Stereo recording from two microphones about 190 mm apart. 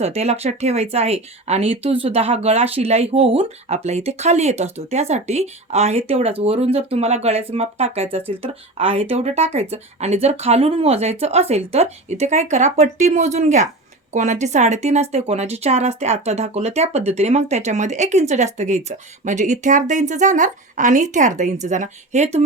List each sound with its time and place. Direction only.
0.0 s speech: 35° right (ahead or behind)